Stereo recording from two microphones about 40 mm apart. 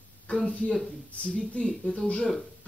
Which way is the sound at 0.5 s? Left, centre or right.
Left.